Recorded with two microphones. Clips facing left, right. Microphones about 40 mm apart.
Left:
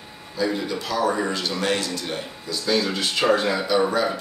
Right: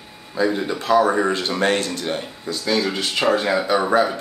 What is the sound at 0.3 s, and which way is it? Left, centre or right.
Speech, right.